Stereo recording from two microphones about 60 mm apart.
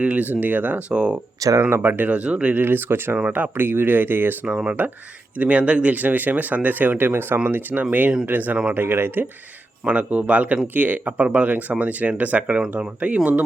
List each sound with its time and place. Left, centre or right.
0.0 s speech: right
0.9 s speech: centre
1.4 s speech: right
1.7 s speech: right
4.4 s speech: centre; by 9.2 s right
9.8 s speech: centre